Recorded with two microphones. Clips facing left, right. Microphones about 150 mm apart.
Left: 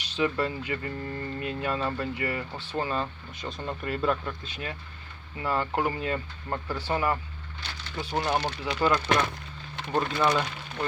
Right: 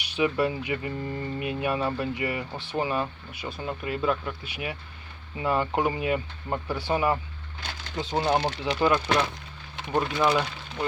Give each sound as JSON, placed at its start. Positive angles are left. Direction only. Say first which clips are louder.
{"t": 0.0, "sound": "speech", "louder": "right 3 dB", "side_deg": -15}